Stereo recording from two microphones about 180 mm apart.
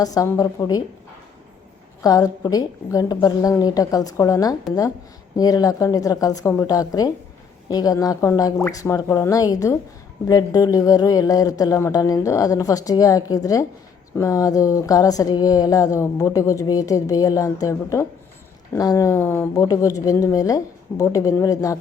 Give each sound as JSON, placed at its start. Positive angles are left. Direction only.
{"t": 0.0, "sound": "speech", "side_deg": 20}
{"t": 2.0, "sound": "speech", "side_deg": 20}